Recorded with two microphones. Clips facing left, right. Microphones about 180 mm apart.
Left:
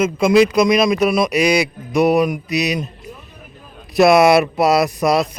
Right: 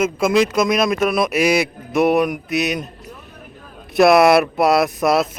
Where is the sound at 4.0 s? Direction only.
Centre (ahead or behind).